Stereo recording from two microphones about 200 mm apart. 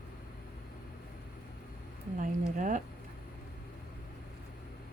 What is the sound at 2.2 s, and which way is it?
Speech, 40° right (ahead or behind).